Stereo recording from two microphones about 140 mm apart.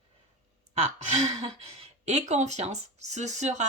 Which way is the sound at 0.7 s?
50° right (ahead or behind).